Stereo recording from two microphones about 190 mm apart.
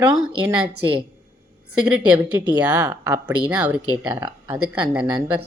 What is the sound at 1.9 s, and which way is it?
Speech, 10° right (ahead or behind).